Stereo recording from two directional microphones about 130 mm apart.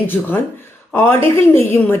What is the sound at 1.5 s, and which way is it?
Speech, 15° left (ahead or behind).